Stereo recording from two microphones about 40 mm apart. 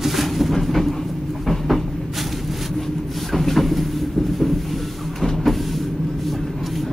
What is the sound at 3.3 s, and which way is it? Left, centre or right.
Vehicle, centre.